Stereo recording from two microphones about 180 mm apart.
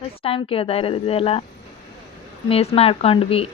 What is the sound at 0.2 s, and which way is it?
A woman's voice, 30° left (ahead or behind).